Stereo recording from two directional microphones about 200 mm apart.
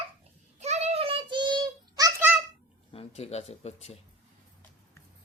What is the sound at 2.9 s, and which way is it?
Speech, 30° left (ahead or behind).